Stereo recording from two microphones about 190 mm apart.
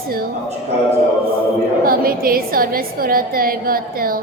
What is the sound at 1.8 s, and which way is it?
A woman's voice, 50° right (ahead or behind).